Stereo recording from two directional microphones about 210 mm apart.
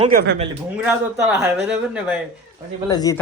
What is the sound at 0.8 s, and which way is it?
Speech, 5° right (ahead or behind).